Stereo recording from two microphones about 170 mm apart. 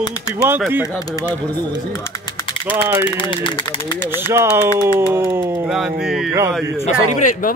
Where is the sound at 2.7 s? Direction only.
10° right (ahead or behind).